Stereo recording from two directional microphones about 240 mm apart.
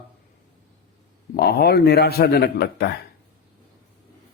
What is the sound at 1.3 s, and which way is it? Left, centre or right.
A man's voice, left.